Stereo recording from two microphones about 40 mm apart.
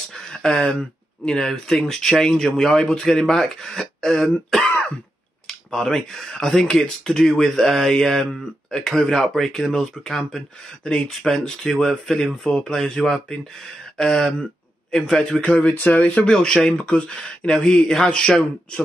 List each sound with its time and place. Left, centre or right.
0.1 s a sound: centre
1.2 s a man's voice: centre
3.0 s speech: centre
15.6 s speech: left
16.3 s speech: centre
16.7 s a man's voice: left